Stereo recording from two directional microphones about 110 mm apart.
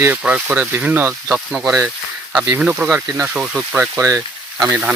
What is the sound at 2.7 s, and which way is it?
Speech, 20° right (ahead or behind).